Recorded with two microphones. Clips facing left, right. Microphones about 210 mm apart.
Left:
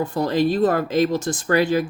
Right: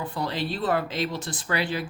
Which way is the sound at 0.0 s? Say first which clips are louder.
Left 10 dB; 45° left (ahead or behind).